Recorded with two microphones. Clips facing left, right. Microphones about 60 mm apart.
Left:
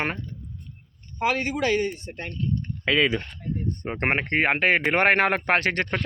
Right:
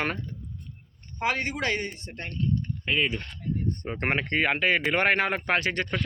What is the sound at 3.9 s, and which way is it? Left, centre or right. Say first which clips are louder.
Speech: left 4 dB; left.